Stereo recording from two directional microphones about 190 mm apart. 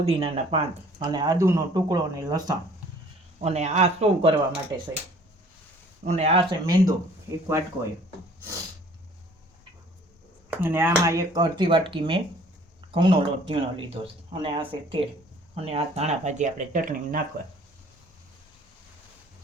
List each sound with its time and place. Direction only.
0.0 s speech: 30° right (ahead or behind)
3.4 s speech: 35° right (ahead or behind)
6.1 s speech: 35° right (ahead or behind); by 7.6 s 15° right (ahead or behind)
10.6 s speech: 10° right (ahead or behind); by 17.2 s 45° right (ahead or behind)